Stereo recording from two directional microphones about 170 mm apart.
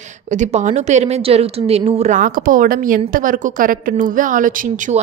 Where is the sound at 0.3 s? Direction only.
45° right (ahead or behind).